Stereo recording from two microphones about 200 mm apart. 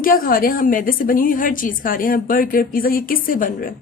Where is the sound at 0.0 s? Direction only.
45° left (ahead or behind).